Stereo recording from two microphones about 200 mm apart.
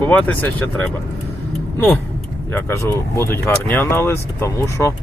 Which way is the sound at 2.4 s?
15° left (ahead or behind).